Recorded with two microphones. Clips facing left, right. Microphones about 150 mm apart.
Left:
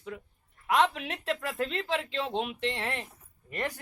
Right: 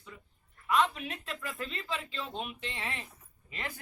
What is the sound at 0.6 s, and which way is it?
Speech, 85° left.